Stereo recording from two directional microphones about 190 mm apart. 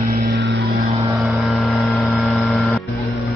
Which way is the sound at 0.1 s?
55° right (ahead or behind).